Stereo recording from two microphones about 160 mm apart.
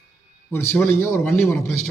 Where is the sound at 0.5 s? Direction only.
15° left (ahead or behind).